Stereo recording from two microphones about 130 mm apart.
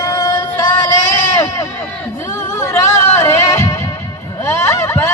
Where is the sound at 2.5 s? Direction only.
25° left (ahead or behind).